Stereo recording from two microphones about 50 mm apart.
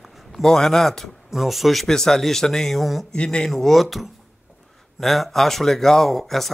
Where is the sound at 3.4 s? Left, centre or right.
Centre.